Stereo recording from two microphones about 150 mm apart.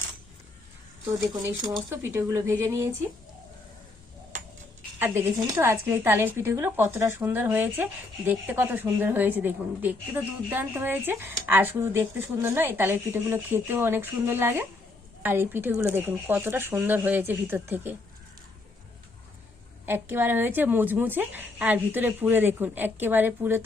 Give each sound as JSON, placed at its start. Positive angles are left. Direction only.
{"t": 1.9, "sound": "a woman's voice", "side_deg": -15}
{"t": 4.9, "sound": "a woman's voice", "side_deg": -15}
{"t": 19.8, "sound": "a woman's voice", "side_deg": -15}